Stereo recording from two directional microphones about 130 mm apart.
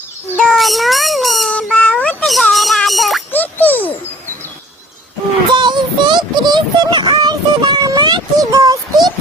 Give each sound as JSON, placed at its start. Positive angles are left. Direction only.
{"t": 0.3, "sound": "cat", "side_deg": 5}
{"t": 2.2, "sound": "a sound", "side_deg": 0}
{"t": 3.3, "sound": "music", "side_deg": 15}
{"t": 5.5, "sound": "child singing", "side_deg": -35}